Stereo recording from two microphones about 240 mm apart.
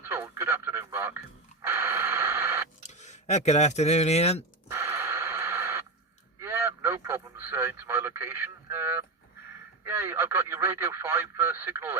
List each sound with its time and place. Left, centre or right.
0.0 s radio: centre
2.8 s speech: left
4.7 s a sound: centre
6.4 s radio: centre
9.8 s speech: centre